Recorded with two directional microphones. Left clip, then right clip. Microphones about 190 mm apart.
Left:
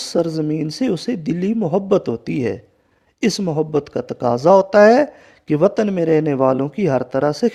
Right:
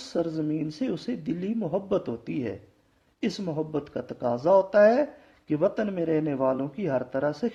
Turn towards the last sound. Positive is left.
turn(degrees=55)  # may be behind; listen again after turning